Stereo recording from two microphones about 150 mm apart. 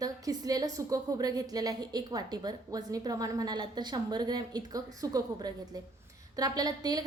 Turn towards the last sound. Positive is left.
turn(degrees=-25)  # may be behind; listen again after turning